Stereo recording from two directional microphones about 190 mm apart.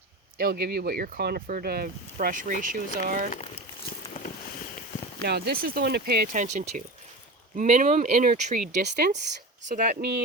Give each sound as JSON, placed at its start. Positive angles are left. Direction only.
{"t": 0.3, "sound": "speech", "side_deg": -55}
{"t": 5.2, "sound": "speech", "side_deg": -60}
{"t": 6.3, "sound": "speech", "side_deg": -40}
{"t": 9.0, "sound": "speech", "side_deg": -60}
{"t": 9.6, "sound": "speech", "side_deg": -45}
{"t": 10.0, "sound": "speech", "side_deg": -60}